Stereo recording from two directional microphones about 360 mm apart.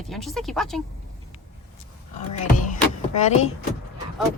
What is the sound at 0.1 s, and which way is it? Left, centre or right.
Speech, centre.